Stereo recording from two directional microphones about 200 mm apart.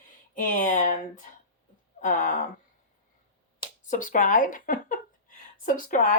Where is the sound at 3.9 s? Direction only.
40° left (ahead or behind).